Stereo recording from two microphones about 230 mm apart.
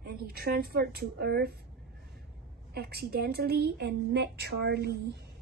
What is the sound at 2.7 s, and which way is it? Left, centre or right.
A woman's voice, right.